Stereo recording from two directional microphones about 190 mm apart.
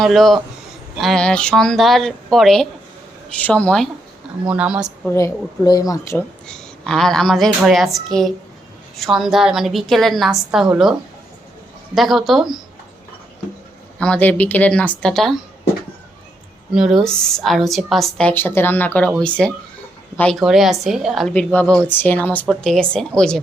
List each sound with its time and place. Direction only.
0.0 s a woman's voice: centre (ahead or behind)
4.4 s a woman's voice: 5° right (ahead or behind)
5.0 s speech: 15° left (ahead or behind)
6.5 s a woman's voice: 5° left (ahead or behind)
11.9 s a woman's voice: centre (ahead or behind)
14.0 s speech: 5° left (ahead or behind)
16.7 s a woman's voice: centre (ahead or behind)